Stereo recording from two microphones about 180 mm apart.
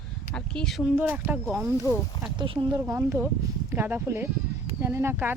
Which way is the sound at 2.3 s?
30° right (ahead or behind).